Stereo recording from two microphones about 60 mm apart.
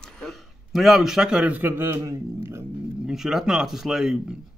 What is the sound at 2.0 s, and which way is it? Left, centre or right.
Speech, right.